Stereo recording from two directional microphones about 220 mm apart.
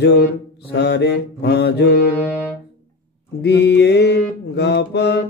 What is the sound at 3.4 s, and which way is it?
Mantra, 50° left (ahead or behind).